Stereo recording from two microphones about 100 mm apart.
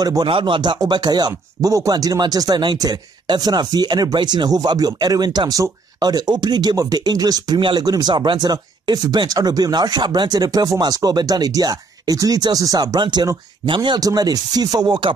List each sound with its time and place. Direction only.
0.0 s speech: 40° right (ahead or behind)
0.3 s speech: 55° right (ahead or behind)